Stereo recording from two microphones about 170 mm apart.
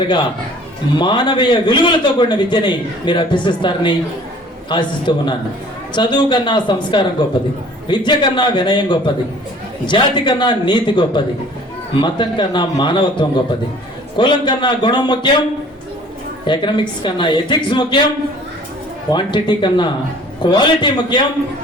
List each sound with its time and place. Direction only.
0.9 s a man's voice: 25° left (ahead or behind)
16.5 s a man's voice: 25° left (ahead or behind)
19.1 s a man's voice: 30° left (ahead or behind)